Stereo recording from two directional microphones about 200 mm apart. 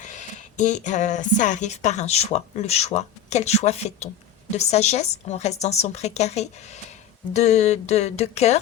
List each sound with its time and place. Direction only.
0.0 s speech: 35° left (ahead or behind)